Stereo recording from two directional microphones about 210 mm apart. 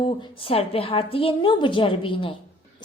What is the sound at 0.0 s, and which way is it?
A woman's voice, 25° left (ahead or behind).